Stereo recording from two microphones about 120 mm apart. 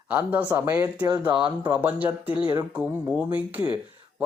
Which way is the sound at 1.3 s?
40° right (ahead or behind).